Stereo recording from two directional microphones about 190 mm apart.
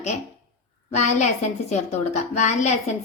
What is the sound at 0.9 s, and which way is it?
A woman's voice, 35° left (ahead or behind).